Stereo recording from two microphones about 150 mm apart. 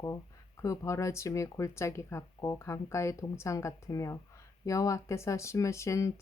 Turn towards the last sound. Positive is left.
turn(degrees=20)  # may be behind; listen again after turning